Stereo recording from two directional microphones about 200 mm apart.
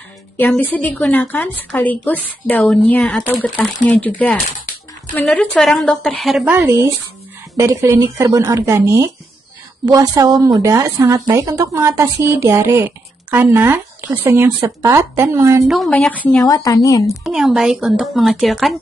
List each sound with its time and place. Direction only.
0.4 s a woman's voice: 10° left (ahead or behind)
5.1 s a woman's voice: 5° left (ahead or behind); by 15.7 s 15° right (ahead or behind)
15.7 s a woman's voice: centre (ahead or behind)
16.4 s a woman's voice: 15° left (ahead or behind)
17.2 s a woman's voice: centre (ahead or behind)